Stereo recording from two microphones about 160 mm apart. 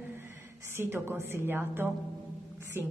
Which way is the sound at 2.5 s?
15° right (ahead or behind).